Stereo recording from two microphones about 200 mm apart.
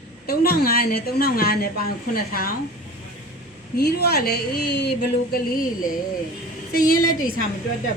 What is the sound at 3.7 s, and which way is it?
A woman's voice, 50° left (ahead or behind).